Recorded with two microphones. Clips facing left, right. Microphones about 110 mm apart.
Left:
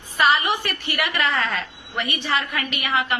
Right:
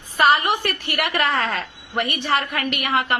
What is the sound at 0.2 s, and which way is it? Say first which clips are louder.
A woman's voice: right 2 dB; 45° right (ahead or behind).